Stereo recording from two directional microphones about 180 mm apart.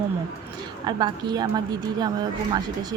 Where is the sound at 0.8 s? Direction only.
25° right (ahead or behind).